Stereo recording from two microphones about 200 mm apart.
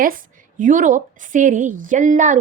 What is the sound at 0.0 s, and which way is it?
A woman's voice, 45° right (ahead or behind).